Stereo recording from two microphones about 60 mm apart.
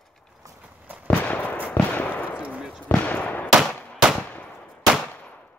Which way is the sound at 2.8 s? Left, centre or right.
Left.